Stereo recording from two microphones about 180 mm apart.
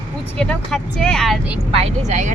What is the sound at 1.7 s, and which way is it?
Speech, 35° right (ahead or behind).